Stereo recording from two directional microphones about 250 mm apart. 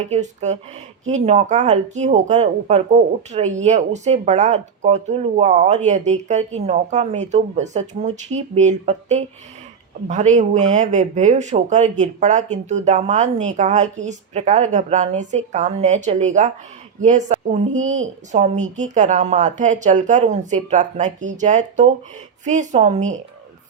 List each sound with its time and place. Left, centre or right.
0.1 s speech: right